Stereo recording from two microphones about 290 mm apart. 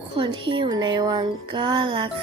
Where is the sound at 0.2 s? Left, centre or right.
Centre.